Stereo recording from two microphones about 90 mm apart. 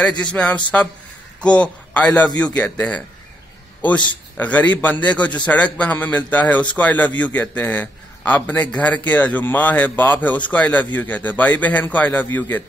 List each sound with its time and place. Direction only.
0.3 s a man's voice: 15° left (ahead or behind)
4.4 s a man's voice: 15° left (ahead or behind)